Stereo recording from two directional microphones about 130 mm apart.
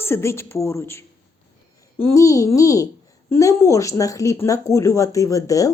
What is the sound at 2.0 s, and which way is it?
A woman's voice, 25° left (ahead or behind).